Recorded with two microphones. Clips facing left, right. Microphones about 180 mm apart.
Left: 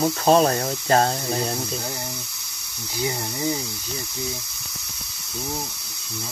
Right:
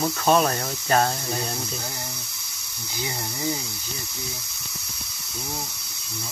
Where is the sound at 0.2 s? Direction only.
30° left (ahead or behind).